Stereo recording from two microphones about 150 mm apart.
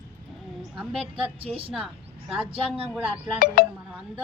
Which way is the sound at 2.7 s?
10° right (ahead or behind).